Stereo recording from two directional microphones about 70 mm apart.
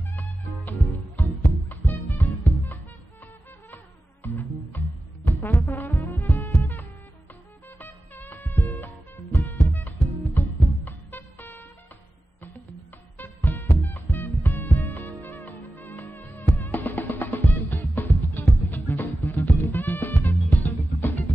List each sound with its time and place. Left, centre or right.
0.1 s music: left
13.2 s music: left